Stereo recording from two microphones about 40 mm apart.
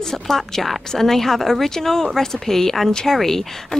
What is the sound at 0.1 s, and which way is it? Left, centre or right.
Speech, centre.